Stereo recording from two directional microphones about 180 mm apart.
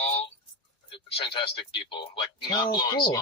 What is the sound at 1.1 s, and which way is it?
Speech, 30° left (ahead or behind).